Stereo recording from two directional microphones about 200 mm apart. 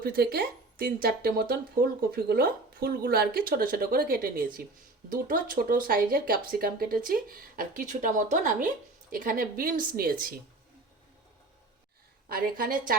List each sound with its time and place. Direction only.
0.0 s speech: 50° right (ahead or behind)
12.3 s speech: 45° right (ahead or behind)